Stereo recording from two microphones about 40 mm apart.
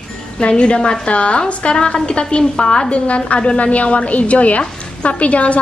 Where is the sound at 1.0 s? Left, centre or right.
Left.